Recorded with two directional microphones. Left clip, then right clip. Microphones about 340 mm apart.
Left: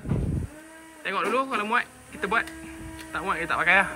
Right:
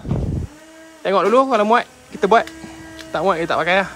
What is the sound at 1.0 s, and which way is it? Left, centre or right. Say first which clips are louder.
Speech: right 11 dB; centre.